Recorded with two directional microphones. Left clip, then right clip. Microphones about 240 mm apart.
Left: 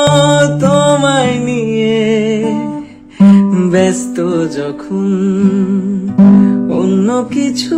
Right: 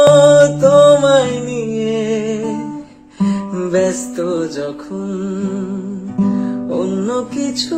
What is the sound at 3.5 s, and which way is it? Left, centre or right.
Music, left.